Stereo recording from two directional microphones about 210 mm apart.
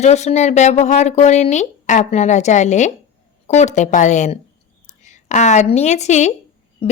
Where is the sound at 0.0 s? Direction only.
30° left (ahead or behind).